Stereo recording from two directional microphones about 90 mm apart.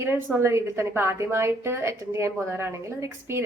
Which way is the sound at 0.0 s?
25° right (ahead or behind).